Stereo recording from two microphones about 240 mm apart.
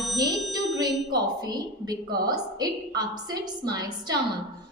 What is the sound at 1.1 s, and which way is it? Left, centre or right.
A woman's voice, centre.